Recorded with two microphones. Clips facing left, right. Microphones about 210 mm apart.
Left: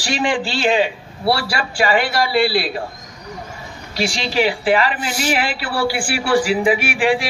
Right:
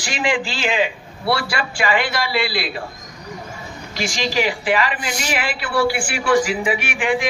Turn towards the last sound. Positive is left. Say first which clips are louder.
# left 3 dB
turn(degrees=35)  # may be behind; listen again after turning